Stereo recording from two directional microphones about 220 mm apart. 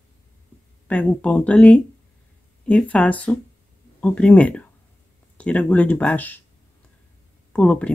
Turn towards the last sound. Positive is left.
turn(degrees=5)  # may be behind; listen again after turning